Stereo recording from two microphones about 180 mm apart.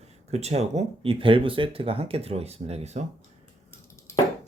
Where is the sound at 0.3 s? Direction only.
35° right (ahead or behind).